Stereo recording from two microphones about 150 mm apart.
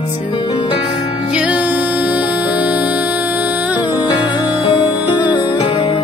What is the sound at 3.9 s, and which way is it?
Music, 30° left (ahead or behind).